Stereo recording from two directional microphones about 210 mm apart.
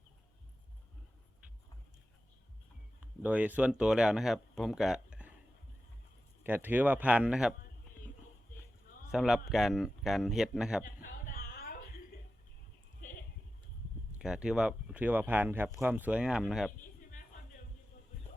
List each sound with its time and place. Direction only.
3.0 s speech: 5° right (ahead or behind)
6.4 s speech: 10° right (ahead or behind)
9.1 s speech: centre (ahead or behind)
10.8 s a sound: 40° left (ahead or behind)
13.0 s sheep: 40° left (ahead or behind)
14.2 s speech: 5° right (ahead or behind)